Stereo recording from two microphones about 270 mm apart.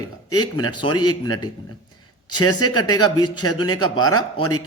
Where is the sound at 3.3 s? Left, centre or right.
Left.